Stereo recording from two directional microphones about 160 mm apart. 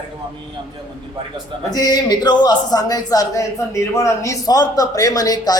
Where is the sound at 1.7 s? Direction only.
25° left (ahead or behind).